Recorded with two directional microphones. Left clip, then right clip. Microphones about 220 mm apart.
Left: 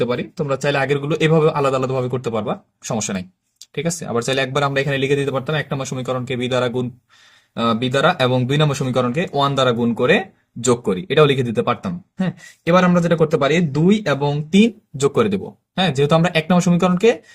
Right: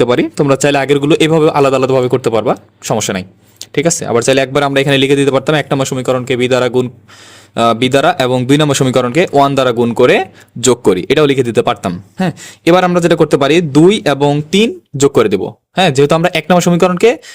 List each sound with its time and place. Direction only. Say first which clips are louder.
0.0 s speech: right 10 dB; 55° right (ahead or behind)